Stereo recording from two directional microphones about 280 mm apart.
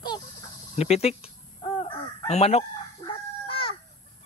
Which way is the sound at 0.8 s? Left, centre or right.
Left.